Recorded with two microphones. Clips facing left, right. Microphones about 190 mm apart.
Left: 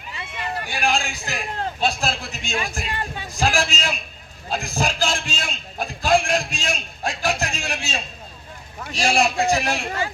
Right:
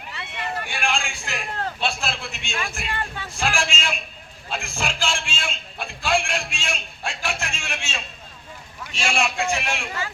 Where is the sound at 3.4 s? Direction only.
40° left (ahead or behind).